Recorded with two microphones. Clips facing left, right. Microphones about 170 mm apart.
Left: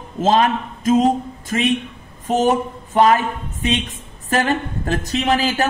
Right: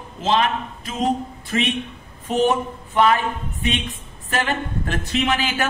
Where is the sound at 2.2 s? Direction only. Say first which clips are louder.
Left 2 dB; 40° left (ahead or behind).